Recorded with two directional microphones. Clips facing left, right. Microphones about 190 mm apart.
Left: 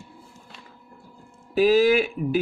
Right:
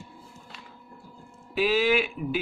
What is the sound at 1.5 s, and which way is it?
Speech, 40° left (ahead or behind).